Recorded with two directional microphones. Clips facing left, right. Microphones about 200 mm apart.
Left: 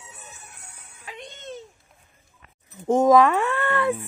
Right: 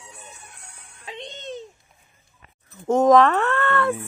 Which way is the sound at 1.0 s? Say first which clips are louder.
Right 3 dB; 25° right (ahead or behind).